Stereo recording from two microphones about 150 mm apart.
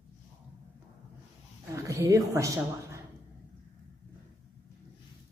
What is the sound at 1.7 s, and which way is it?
A woman's voice, 20° right (ahead or behind).